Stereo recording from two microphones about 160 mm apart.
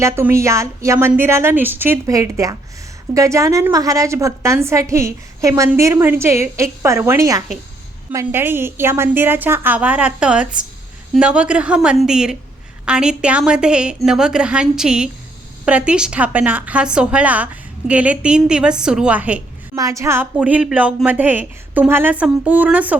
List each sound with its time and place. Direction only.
0.0 s a woman's voice: 15° right (ahead or behind)
19.7 s a woman's voice: 20° right (ahead or behind)